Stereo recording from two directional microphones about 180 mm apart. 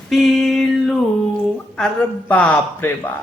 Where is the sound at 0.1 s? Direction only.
Centre (ahead or behind).